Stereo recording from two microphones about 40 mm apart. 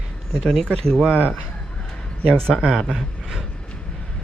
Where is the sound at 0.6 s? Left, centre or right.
Centre.